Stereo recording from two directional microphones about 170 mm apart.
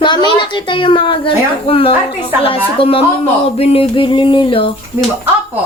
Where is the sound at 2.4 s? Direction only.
35° left (ahead or behind).